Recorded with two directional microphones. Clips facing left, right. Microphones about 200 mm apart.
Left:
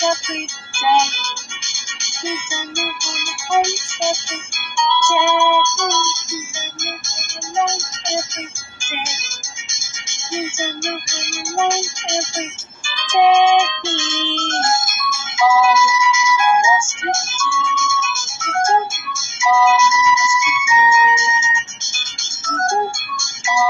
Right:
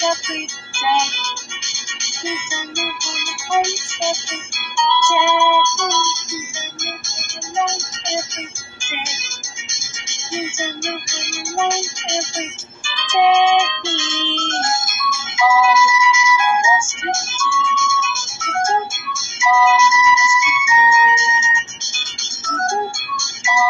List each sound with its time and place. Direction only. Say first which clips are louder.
0.7 s music: left 3 dB; 45° left (ahead or behind)
7.5 s music: left 1 dB; 45° left (ahead or behind)
9.7 s music: right 2 dB; 45° left (ahead or behind)